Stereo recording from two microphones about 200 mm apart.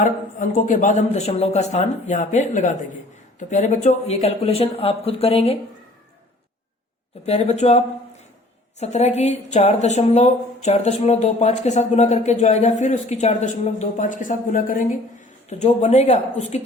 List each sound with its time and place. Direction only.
0.0 s a woman's voice: 40° left (ahead or behind)
7.3 s a woman's voice: 35° left (ahead or behind)
8.8 s a woman's voice: 35° left (ahead or behind)